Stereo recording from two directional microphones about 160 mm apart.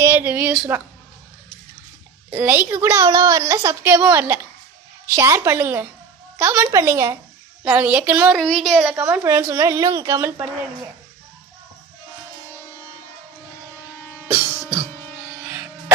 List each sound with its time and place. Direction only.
0.0 s a woman's voice: 15° right (ahead or behind)
2.3 s a woman's voice: 10° right (ahead or behind)
8.4 s speech: centre (ahead or behind)
9.0 s a woman's voice: 10° right (ahead or behind)